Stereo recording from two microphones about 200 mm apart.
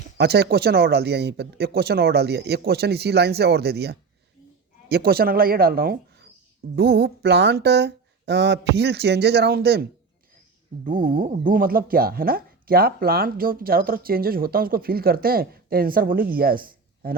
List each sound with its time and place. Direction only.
0.2 s speech: 55° right (ahead or behind)
10.8 s speech: 40° right (ahead or behind)